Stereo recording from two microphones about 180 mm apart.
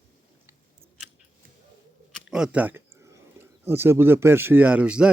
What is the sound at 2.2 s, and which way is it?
Speech, 5° right (ahead or behind).